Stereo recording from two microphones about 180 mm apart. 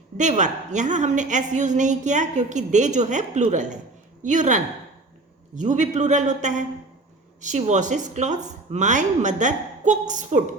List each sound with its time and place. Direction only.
0.2 s a woman's voice: 40° right (ahead or behind)